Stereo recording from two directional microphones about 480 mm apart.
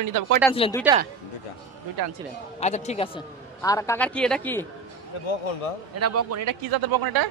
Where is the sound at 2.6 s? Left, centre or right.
Centre.